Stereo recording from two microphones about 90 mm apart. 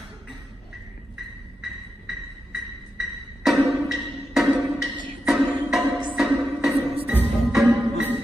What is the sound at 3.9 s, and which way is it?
Music, centre (ahead or behind).